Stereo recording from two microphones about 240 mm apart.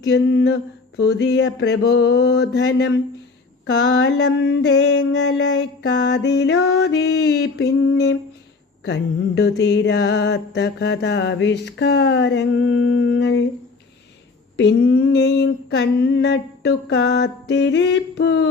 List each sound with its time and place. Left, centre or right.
0.0 s mantra: left
14.5 s mantra: left